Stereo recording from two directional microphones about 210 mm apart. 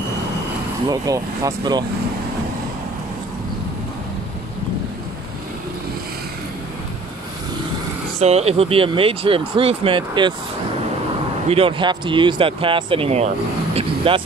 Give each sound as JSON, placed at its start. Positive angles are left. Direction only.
{"t": 0.8, "sound": "speech", "side_deg": -15}
{"t": 8.2, "sound": "speech", "side_deg": -30}
{"t": 11.4, "sound": "speech", "side_deg": -25}
{"t": 13.7, "sound": "vehicle", "side_deg": -25}